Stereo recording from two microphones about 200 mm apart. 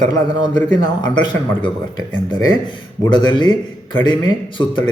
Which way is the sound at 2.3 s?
20° left (ahead or behind).